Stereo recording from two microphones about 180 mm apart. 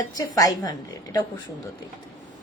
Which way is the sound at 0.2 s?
20° left (ahead or behind).